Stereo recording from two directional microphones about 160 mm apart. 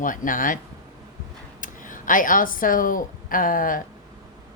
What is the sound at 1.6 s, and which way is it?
A woman's voice, 55° left (ahead or behind).